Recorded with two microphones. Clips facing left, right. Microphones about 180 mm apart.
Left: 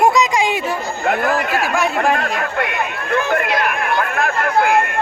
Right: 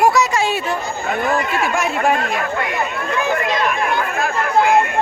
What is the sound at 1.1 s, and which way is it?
Speech, 65° left (ahead or behind).